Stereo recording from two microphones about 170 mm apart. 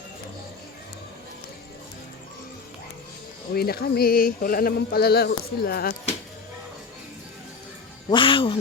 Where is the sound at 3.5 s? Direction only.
65° left (ahead or behind).